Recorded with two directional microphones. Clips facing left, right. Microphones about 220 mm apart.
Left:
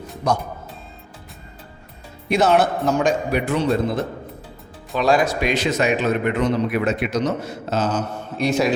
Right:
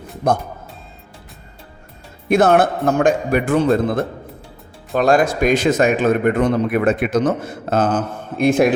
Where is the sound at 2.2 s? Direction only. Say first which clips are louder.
Right 3 dB; 50° right (ahead or behind).